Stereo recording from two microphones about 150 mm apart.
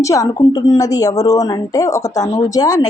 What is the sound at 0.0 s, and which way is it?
Speech, 20° left (ahead or behind).